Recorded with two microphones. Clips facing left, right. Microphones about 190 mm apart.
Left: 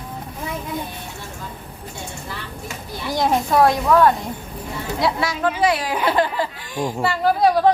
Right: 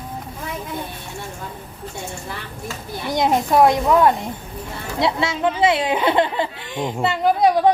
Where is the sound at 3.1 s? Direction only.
20° right (ahead or behind).